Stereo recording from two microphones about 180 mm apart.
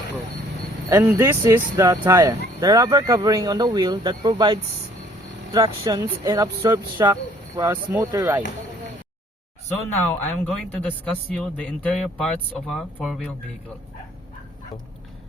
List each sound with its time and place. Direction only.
0.9 s speech: 15° right (ahead or behind)
10.2 s speech: 10° left (ahead or behind)